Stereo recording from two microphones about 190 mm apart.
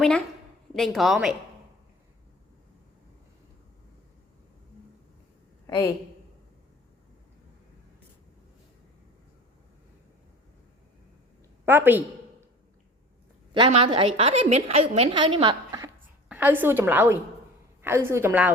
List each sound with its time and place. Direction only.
0.8 s a woman's voice: centre (ahead or behind)
5.6 s a woman's voice: 20° left (ahead or behind)
11.6 s a woman's voice: 10° right (ahead or behind)
13.5 s a woman's voice: 30° right (ahead or behind)
16.3 s a woman's voice: 10° right (ahead or behind)